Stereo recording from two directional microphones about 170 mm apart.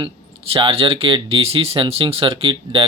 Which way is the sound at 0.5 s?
35° right (ahead or behind).